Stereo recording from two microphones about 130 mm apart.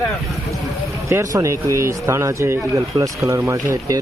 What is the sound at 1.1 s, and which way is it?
Speech, 20° right (ahead or behind).